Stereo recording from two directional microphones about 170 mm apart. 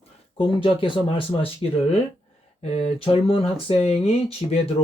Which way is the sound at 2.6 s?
40° left (ahead or behind).